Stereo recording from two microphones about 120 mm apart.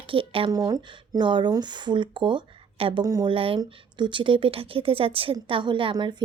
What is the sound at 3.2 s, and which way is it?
A woman's voice, 50° right (ahead or behind).